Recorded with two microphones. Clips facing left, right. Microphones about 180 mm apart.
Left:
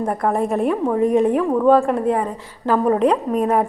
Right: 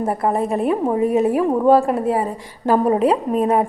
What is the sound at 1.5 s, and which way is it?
Speech, 20° right (ahead or behind).